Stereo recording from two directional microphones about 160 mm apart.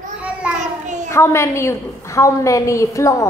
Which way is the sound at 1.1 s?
15° left (ahead or behind).